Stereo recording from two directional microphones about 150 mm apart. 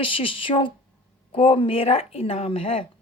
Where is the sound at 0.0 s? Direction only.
35° left (ahead or behind).